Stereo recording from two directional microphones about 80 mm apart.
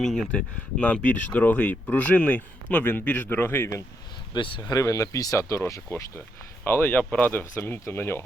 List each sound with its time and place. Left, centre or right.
0.0 s speech: centre; by 3.8 s left
4.4 s speech: left
4.7 s speech: left
6.7 s speech: left
7.6 s speech: left